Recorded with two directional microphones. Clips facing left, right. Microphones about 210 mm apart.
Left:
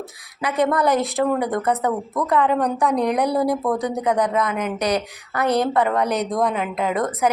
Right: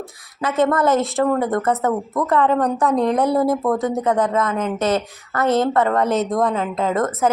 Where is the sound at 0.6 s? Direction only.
15° left (ahead or behind).